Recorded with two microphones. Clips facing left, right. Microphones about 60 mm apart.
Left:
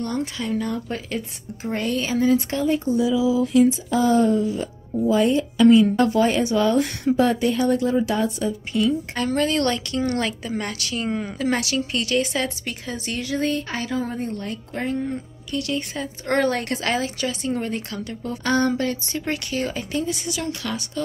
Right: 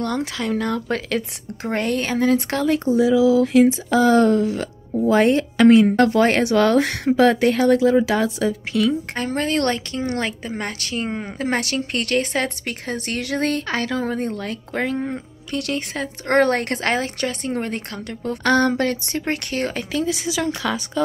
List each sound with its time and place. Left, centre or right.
0.0 s speech: right
5.9 s speech: right
9.1 s a woman's voice: right
15.0 s speech: right
16.3 s a woman's voice: right
19.9 s speech: right